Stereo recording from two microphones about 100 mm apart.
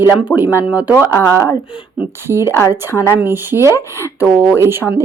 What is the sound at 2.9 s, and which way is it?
Speech, 25° left (ahead or behind).